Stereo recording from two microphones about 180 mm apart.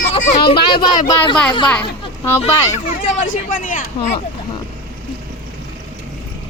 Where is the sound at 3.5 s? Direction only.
45° left (ahead or behind).